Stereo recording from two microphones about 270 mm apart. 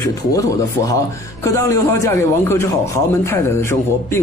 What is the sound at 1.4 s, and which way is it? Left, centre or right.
Speech, centre.